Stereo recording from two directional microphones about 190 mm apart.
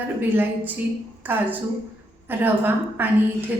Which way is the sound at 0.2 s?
10° right (ahead or behind).